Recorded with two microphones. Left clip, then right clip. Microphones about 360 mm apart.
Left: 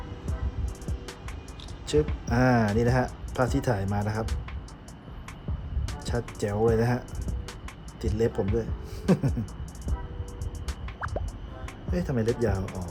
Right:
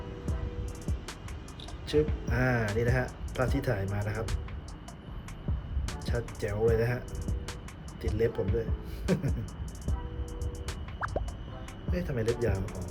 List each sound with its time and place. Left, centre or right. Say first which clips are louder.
1.9 s speech: left 3 dB; centre
5.9 s speech: left 3 dB; centre
10.7 s music: even; centre
11.9 s speech: left 3 dB; centre